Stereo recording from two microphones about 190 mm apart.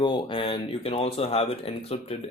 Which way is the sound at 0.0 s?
25° left (ahead or behind).